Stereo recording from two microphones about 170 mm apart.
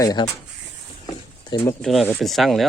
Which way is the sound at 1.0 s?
25° left (ahead or behind).